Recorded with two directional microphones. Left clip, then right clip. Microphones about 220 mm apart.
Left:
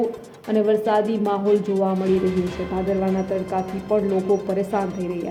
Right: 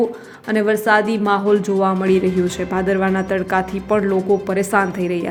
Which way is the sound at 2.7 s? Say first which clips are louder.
Right 4 dB; 20° right (ahead or behind).